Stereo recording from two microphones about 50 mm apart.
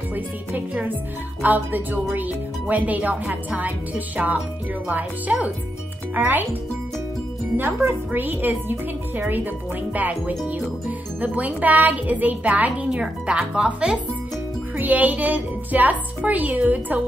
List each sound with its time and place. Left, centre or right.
1.4 s speech: right
7.5 s speech: right
14.8 s speech: right